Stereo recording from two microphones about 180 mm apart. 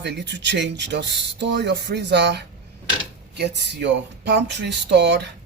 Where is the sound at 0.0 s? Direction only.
70° right (ahead or behind).